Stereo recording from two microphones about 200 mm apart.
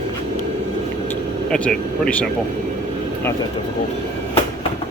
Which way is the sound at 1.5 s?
5° left (ahead or behind).